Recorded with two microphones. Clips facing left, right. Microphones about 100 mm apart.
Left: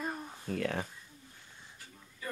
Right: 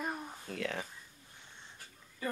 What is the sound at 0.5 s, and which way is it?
Speech, 15° left (ahead or behind).